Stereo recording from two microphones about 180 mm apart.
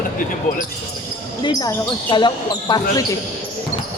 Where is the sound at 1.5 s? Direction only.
25° left (ahead or behind).